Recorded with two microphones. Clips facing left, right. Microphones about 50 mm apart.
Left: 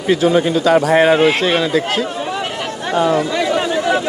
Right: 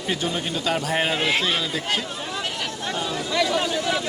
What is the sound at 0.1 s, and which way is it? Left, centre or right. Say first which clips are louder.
A man's voice: left 13 dB; left.